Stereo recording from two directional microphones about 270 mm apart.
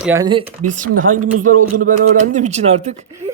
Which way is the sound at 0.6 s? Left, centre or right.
Right.